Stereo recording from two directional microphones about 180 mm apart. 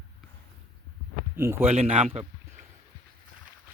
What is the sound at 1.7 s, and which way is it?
Speech, 35° right (ahead or behind).